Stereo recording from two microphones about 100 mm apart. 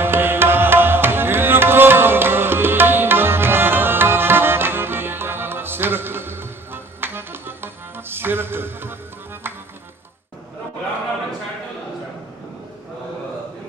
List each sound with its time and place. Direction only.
0.0 s music: 20° right (ahead or behind)